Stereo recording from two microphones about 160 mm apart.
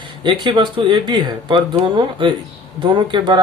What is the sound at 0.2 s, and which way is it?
Speech, 30° right (ahead or behind).